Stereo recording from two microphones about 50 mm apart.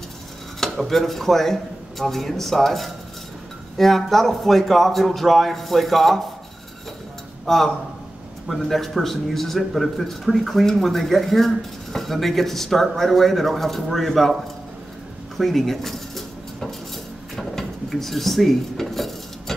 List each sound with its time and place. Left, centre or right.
0.6 s speech: centre
7.4 s a man's voice: centre
15.3 s dishes: centre